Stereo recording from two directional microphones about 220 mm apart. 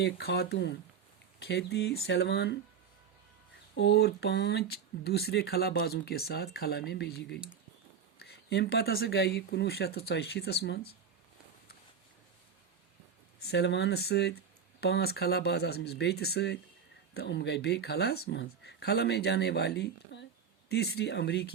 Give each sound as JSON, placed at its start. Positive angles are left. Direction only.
{"t": 0.0, "sound": "speech", "side_deg": 50}
{"t": 3.8, "sound": "speech", "side_deg": 50}
{"t": 13.5, "sound": "speech", "side_deg": 50}